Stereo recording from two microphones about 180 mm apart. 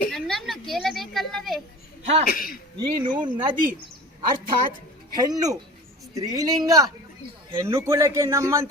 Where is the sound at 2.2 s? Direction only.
55° left (ahead or behind).